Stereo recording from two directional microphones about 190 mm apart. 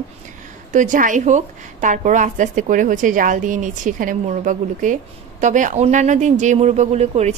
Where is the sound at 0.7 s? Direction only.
45° right (ahead or behind).